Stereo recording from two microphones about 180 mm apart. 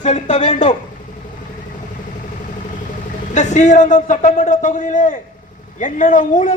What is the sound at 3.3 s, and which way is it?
A man's voice, 40° left (ahead or behind).